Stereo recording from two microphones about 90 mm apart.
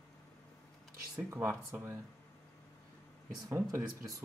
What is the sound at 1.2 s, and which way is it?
Speech, 25° right (ahead or behind).